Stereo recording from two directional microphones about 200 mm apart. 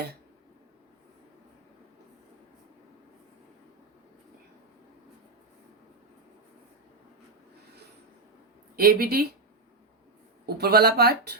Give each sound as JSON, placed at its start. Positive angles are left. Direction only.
{"t": 8.7, "sound": "speech", "side_deg": -50}
{"t": 10.4, "sound": "speech", "side_deg": -50}